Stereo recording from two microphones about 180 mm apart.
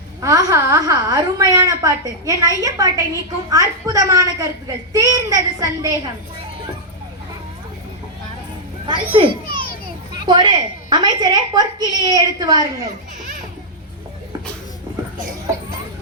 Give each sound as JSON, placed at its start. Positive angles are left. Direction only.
{"t": 0.2, "sound": "a woman's voice", "side_deg": -20}
{"t": 9.1, "sound": "a child's voice", "side_deg": -30}